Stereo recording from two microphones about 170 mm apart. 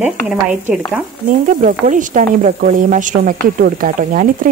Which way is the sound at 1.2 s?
55° right (ahead or behind).